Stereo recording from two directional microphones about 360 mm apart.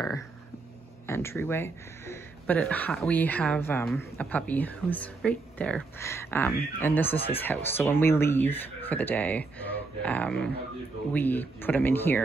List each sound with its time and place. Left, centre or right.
1.0 s speech: centre